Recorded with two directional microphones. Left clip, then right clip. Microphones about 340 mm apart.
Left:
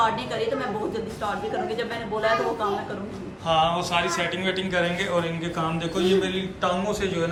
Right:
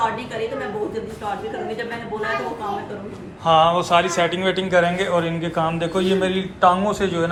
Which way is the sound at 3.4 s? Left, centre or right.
Centre.